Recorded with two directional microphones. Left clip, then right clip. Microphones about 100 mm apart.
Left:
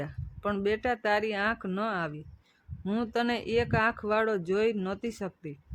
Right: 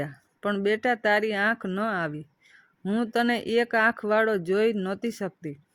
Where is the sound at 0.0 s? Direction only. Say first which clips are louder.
Right 4 dB; 25° right (ahead or behind).